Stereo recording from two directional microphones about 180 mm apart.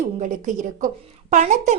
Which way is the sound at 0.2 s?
45° right (ahead or behind).